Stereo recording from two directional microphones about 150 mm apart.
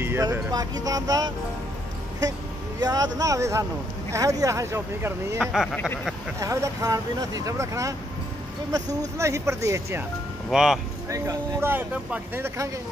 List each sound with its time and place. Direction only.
0.0 s speech: 15° right (ahead or behind)
2.8 s speech: 25° right (ahead or behind)
5.4 s speech: centre (ahead or behind)
6.4 s speech: 20° right (ahead or behind)
9.0 s speech: 20° right (ahead or behind)
10.5 s speech: 5° right (ahead or behind)
11.1 s speech: 20° right (ahead or behind)